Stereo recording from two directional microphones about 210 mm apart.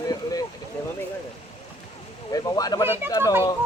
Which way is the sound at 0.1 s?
15° left (ahead or behind).